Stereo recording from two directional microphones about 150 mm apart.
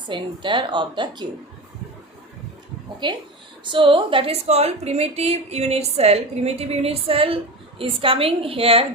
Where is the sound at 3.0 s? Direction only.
30° right (ahead or behind).